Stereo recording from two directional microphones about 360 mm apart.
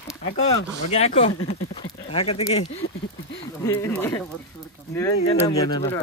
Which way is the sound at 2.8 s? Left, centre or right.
Left.